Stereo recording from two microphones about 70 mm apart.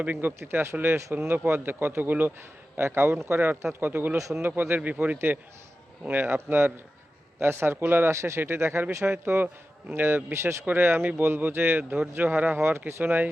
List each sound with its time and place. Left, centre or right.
0.0 s speech: right
4.2 s speech: right
4.4 s speech: right
8.1 s speech: right
10.3 s speech: right